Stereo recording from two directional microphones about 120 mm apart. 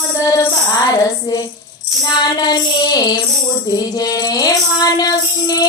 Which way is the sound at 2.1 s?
35° left (ahead or behind).